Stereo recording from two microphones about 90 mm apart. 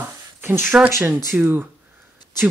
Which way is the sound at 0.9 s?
30° right (ahead or behind).